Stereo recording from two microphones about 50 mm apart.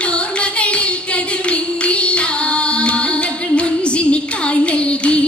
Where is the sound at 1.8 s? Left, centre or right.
Left.